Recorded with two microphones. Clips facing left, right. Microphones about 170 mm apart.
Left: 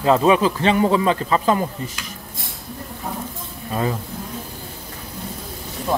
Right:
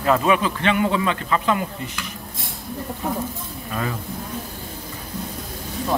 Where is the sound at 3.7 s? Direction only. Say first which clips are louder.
Left 4 dB; 30° left (ahead or behind).